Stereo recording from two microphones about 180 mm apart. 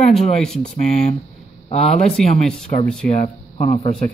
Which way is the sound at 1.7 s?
35° left (ahead or behind).